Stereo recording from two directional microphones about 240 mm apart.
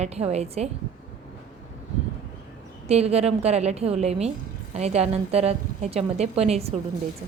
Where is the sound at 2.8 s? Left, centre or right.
Right.